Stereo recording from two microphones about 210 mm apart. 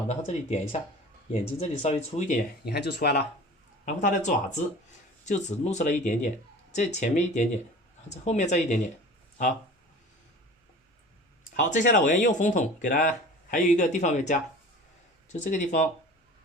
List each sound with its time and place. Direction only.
0.1 s speech: 35° left (ahead or behind)
2.6 s speech: 50° left (ahead or behind)
4.0 s speech: 35° left (ahead or behind)
11.7 s speech: 40° left (ahead or behind)